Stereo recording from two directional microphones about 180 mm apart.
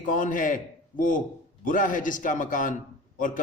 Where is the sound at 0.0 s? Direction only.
45° left (ahead or behind).